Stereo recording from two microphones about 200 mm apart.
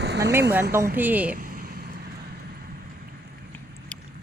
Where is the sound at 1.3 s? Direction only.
40° right (ahead or behind).